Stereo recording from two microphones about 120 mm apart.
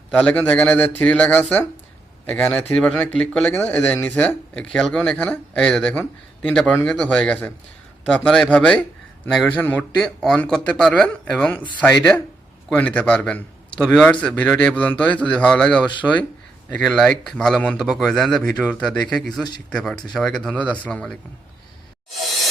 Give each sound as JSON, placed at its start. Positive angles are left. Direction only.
{"t": 0.1, "sound": "speech", "side_deg": 10}
{"t": 5.9, "sound": "speech", "side_deg": 15}
{"t": 6.5, "sound": "a man's voice", "side_deg": 5}